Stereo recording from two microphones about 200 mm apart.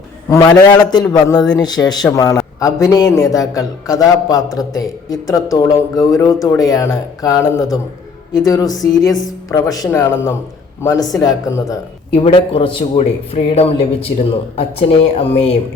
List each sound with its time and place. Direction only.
0.3 s a man's voice: 15° left (ahead or behind)